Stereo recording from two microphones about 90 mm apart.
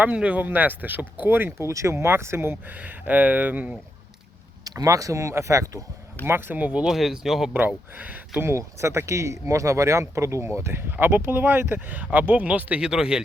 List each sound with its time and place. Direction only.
0.0 s speech: 15° right (ahead or behind)
4.6 s speech: 40° right (ahead or behind)
6.2 s speech: 25° right (ahead or behind); by 7.5 s 5° right (ahead or behind)
7.9 s speech: 15° right (ahead or behind)
8.4 s speech: 30° right (ahead or behind); by 13.2 s 5° right (ahead or behind)